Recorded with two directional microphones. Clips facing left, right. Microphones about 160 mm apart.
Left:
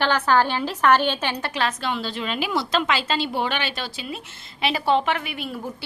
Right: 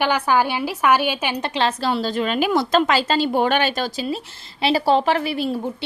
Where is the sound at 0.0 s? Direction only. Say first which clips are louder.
Right 1 dB; 10° right (ahead or behind); by 5.5 s 35° right (ahead or behind).